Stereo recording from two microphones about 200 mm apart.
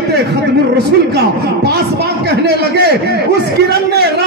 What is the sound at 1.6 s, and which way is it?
A man's voice, 55° right (ahead or behind).